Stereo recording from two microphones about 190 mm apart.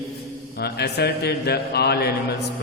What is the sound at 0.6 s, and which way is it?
A man's voice, 60° left (ahead or behind).